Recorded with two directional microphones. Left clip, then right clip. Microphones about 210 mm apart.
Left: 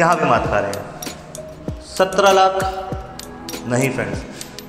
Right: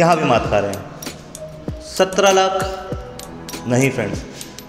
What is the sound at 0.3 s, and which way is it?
Speech, 45° right (ahead or behind).